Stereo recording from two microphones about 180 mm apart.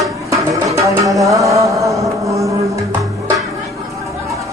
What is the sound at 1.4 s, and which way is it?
Chant, 15° right (ahead or behind).